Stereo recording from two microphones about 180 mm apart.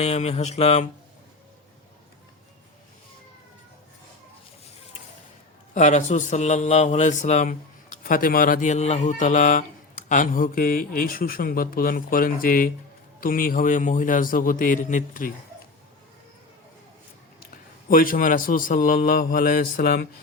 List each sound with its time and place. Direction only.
0.0 s mantra: 35° left (ahead or behind)
5.7 s a man's voice: 40° left (ahead or behind)
17.8 s a man's voice: 50° left (ahead or behind)